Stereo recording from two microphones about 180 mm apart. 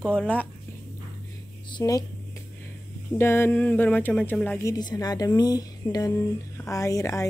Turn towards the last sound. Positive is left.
turn(degrees=15)  # may be behind; listen again after turning